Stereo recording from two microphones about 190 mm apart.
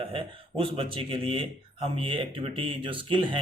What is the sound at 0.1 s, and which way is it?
Speech, 25° right (ahead or behind).